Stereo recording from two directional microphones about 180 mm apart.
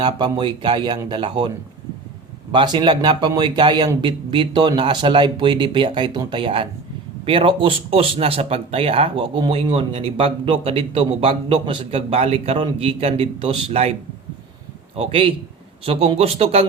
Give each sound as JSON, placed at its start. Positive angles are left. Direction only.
{"t": 0.0, "sound": "a man's voice", "side_deg": -25}
{"t": 14.9, "sound": "speech", "side_deg": -30}